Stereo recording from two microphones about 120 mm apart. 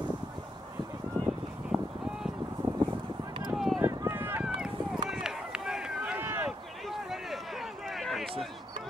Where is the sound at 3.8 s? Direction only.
15° right (ahead or behind).